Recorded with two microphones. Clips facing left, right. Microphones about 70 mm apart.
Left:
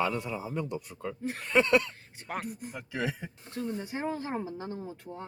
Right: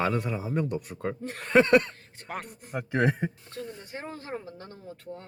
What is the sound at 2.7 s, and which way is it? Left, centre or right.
Speech, right.